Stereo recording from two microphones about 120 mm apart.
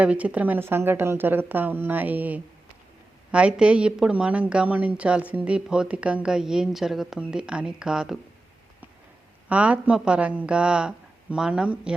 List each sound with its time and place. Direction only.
0.0 s a woman's voice: 10° right (ahead or behind)
9.5 s a woman's voice: 10° right (ahead or behind)